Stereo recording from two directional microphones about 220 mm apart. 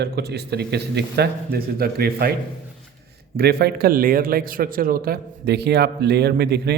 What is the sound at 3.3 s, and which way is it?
A man's voice, 45° right (ahead or behind).